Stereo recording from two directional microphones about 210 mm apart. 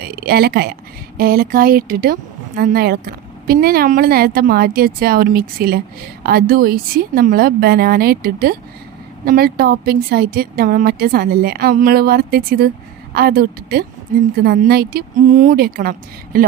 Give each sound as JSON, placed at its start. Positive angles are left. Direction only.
{"t": 0.0, "sound": "a woman's voice", "side_deg": -50}